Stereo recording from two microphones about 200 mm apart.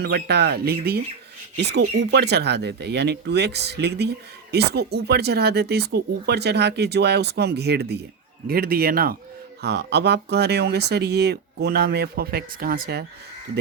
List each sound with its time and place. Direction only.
0.0 s speech: 55° right (ahead or behind)